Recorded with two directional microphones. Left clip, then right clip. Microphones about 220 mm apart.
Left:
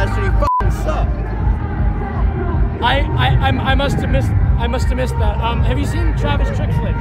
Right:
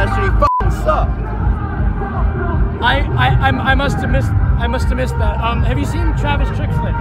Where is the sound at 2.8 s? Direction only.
25° left (ahead or behind).